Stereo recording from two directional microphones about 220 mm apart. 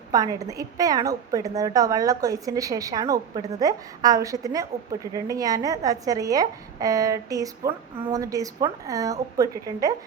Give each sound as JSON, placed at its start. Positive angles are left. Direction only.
{"t": 0.1, "sound": "a woman's voice", "side_deg": -15}